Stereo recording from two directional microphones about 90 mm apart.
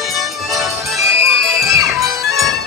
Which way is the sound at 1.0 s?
35° right (ahead or behind).